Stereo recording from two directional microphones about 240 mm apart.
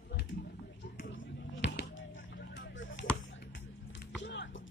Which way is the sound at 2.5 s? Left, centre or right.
Left.